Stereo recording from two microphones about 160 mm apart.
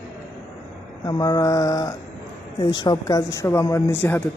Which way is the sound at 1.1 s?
25° left (ahead or behind).